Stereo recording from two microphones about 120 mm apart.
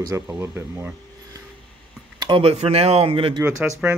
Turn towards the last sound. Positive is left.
turn(degrees=-15)  # may be behind; listen again after turning